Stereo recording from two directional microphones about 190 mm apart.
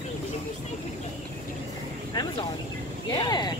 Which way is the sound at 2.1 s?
20° left (ahead or behind).